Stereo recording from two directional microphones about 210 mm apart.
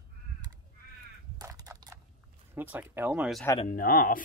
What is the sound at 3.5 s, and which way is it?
Speech, 40° left (ahead or behind).